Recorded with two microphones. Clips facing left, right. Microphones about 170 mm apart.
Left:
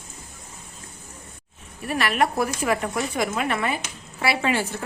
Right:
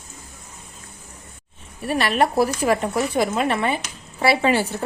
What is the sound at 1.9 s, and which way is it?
Speech, 30° right (ahead or behind).